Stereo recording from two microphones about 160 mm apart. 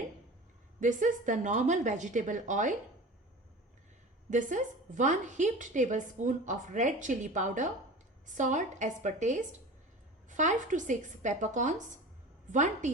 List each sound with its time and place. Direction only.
0.8 s a woman's voice: 55° right (ahead or behind)
4.3 s a woman's voice: 50° right (ahead or behind)